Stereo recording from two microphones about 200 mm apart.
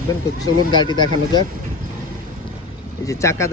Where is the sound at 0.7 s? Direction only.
20° left (ahead or behind).